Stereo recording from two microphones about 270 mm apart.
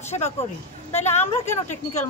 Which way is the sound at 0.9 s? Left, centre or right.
Left.